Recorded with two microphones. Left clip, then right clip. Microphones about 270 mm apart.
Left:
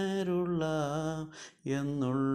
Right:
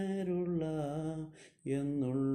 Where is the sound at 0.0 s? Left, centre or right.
Centre.